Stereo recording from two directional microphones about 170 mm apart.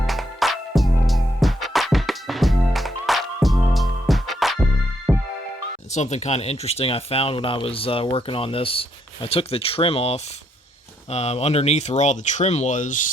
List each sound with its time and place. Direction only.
0.0 s music: centre (ahead or behind)
5.9 s speech: 40° left (ahead or behind)